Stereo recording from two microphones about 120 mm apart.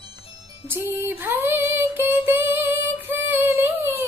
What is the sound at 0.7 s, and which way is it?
Music, 20° right (ahead or behind).